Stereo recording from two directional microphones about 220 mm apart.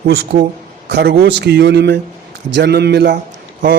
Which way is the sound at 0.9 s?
50° right (ahead or behind).